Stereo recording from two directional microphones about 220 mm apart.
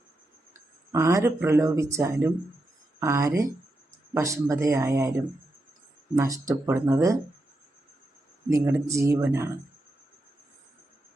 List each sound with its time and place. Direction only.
0.9 s speech: 15° right (ahead or behind)
8.4 s speech: 15° right (ahead or behind)